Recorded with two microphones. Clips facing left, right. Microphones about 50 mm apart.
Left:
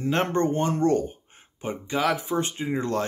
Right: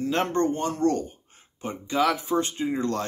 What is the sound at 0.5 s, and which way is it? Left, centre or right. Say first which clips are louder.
Speech: left 3 dB; left.